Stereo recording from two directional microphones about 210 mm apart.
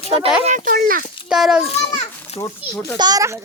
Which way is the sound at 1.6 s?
30° left (ahead or behind).